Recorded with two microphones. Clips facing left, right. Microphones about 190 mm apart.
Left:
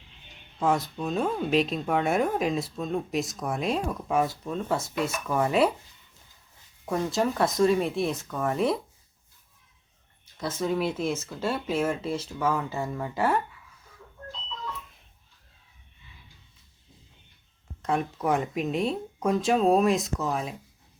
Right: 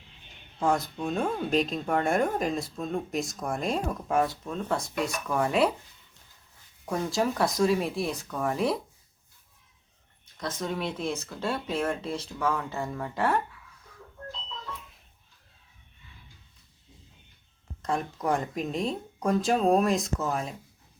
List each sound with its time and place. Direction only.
0.6 s speech: centre (ahead or behind)
6.8 s speech: centre (ahead or behind)
10.3 s speech: 5° left (ahead or behind)
17.8 s speech: 5° left (ahead or behind)